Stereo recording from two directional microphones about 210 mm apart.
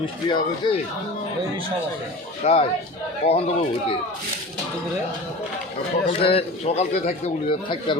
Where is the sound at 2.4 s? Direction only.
30° left (ahead or behind).